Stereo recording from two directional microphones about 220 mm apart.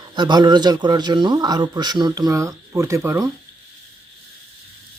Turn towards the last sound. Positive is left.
turn(degrees=-10)  # may be behind; listen again after turning